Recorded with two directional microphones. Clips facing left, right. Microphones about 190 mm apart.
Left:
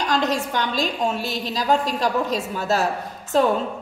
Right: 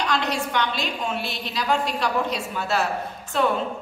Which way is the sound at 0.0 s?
40° left (ahead or behind).